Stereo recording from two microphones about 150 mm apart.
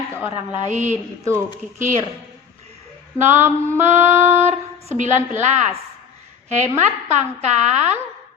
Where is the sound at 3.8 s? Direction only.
50° right (ahead or behind).